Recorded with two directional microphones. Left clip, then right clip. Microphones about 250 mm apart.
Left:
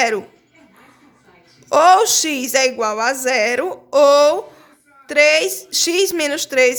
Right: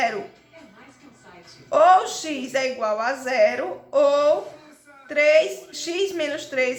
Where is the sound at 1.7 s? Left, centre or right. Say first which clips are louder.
Left 5 dB; left.